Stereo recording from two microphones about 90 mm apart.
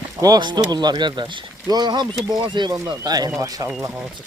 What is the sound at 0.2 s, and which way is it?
Speech, 50° right (ahead or behind).